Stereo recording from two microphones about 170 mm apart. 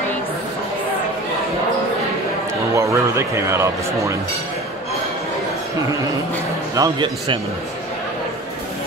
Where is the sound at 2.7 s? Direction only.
15° right (ahead or behind).